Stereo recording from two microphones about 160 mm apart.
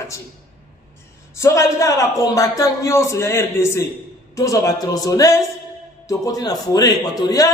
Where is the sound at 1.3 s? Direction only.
20° left (ahead or behind).